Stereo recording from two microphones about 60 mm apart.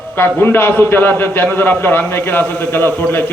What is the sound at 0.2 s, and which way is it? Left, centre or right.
A man's voice, left.